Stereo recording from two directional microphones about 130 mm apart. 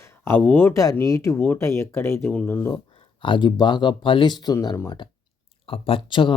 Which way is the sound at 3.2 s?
35° left (ahead or behind).